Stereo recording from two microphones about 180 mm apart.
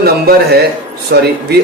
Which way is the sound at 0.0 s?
60° right (ahead or behind).